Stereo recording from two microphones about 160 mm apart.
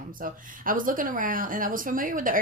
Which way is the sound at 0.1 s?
60° right (ahead or behind).